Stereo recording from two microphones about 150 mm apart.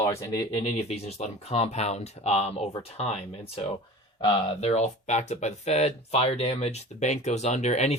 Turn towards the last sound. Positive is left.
turn(degrees=50)  # may be behind; listen again after turning